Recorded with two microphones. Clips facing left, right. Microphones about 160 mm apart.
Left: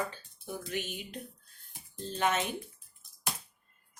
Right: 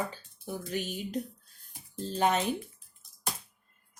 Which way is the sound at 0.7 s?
40° right (ahead or behind).